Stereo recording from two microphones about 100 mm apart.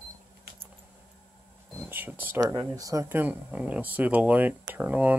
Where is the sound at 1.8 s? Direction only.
20° right (ahead or behind).